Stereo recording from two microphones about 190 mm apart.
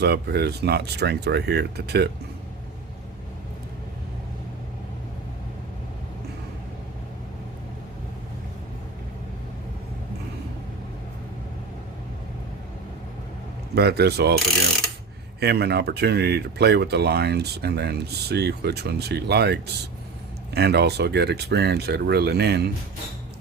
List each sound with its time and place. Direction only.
0.0 s speech: 60° right (ahead or behind)
13.7 s speech: 60° right (ahead or behind)
15.4 s speech: 60° right (ahead or behind)